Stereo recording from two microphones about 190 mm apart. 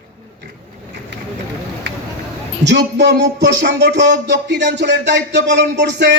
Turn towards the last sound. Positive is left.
turn(degrees=-65)  # may be behind; listen again after turning